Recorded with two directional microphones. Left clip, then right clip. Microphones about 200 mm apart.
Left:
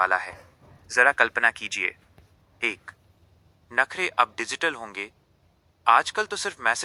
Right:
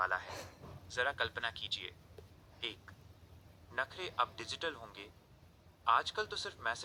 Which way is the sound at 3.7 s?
50° left (ahead or behind).